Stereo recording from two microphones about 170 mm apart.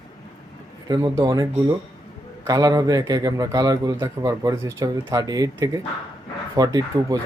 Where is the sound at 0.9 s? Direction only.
25° right (ahead or behind).